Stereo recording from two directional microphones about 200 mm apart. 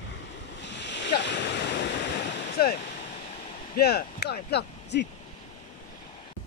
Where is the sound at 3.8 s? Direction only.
50° left (ahead or behind).